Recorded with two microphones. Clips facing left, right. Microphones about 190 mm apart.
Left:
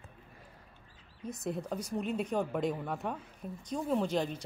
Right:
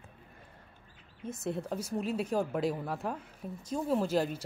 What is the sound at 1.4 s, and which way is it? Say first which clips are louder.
Speech: right 1 dB; 5° right (ahead or behind).